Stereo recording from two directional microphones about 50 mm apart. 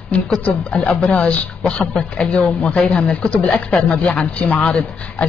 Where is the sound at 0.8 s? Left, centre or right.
Left.